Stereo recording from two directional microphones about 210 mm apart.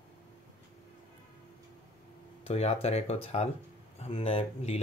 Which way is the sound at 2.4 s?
30° left (ahead or behind).